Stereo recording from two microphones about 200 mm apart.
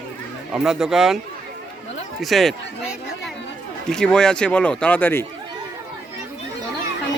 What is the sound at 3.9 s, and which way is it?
Speech, 5° left (ahead or behind).